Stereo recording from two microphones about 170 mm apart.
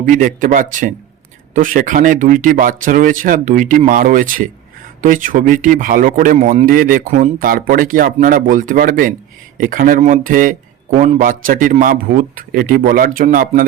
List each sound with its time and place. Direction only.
0.0 s speech: 50° right (ahead or behind)